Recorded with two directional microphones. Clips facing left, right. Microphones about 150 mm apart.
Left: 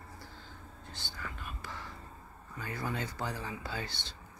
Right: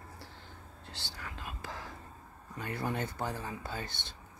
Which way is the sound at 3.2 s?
50° right (ahead or behind).